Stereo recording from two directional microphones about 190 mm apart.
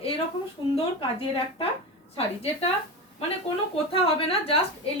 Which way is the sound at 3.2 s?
30° left (ahead or behind).